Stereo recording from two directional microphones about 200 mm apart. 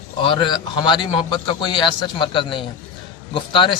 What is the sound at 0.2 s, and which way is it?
A man's voice, 25° left (ahead or behind).